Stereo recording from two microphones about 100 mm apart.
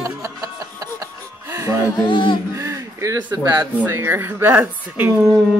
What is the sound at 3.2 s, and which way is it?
Speech, 45° right (ahead or behind).